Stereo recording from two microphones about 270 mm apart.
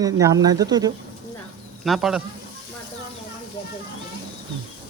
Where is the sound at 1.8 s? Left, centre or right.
Centre.